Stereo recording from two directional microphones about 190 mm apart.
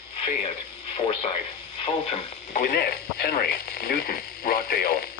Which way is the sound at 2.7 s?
55° left (ahead or behind).